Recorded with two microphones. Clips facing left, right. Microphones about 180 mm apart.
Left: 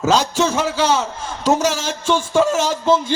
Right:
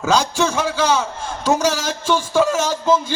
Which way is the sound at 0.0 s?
30° left (ahead or behind).